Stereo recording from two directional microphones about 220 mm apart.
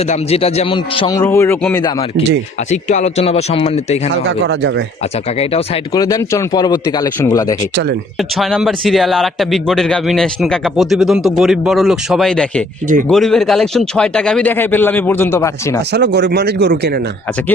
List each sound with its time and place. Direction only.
0.1 s a man's voice: 25° left (ahead or behind)
2.6 s a man's voice: 30° left (ahead or behind)
4.3 s speech: 55° right (ahead or behind)
5.4 s a man's voice: 25° left (ahead or behind)
5.9 s speech: 15° left (ahead or behind)
8.4 s a man's voice: centre (ahead or behind)
15.9 s speech: 50° right (ahead or behind)